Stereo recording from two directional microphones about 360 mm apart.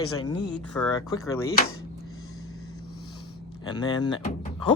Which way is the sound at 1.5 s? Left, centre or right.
Left.